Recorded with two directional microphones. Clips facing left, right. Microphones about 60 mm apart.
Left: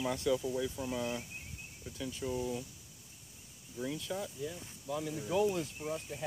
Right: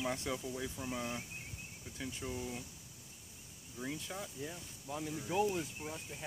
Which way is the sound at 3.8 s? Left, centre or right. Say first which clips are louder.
Left 5 dB; right.